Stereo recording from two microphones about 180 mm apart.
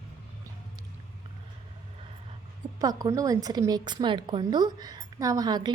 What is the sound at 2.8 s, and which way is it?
A woman's voice, 20° right (ahead or behind).